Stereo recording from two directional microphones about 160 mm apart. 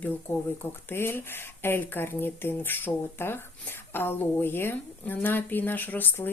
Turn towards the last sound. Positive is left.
turn(degrees=10)  # may be behind; listen again after turning